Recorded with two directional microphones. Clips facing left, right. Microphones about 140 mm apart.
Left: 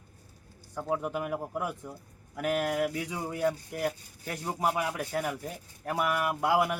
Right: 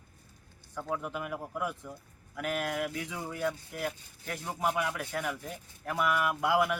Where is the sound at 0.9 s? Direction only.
40° left (ahead or behind).